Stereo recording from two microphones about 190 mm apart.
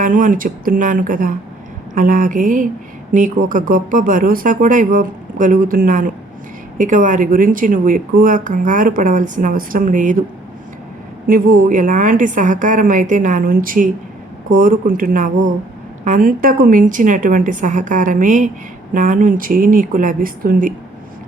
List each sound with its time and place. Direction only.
0.0 s a woman's voice: 45° right (ahead or behind)
11.3 s a woman's voice: 45° right (ahead or behind)